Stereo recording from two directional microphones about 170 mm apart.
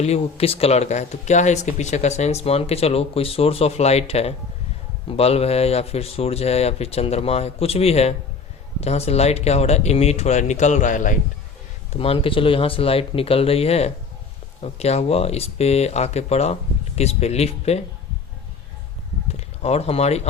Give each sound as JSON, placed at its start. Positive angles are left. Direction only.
{"t": 0.0, "sound": "speech", "side_deg": 35}
{"t": 11.9, "sound": "speech", "side_deg": 35}
{"t": 19.3, "sound": "speech", "side_deg": 35}